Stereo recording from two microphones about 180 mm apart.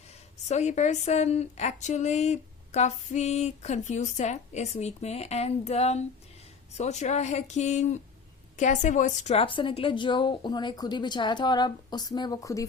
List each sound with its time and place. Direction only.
0.4 s a woman's voice: 40° left (ahead or behind); by 12.6 s 20° left (ahead or behind)